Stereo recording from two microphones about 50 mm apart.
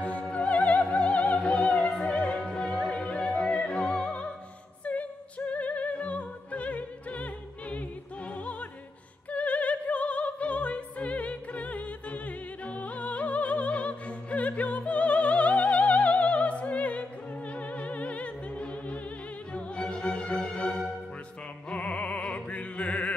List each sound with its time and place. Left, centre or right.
0.2 s opera: left
8.3 s opera: left
19.5 s music: left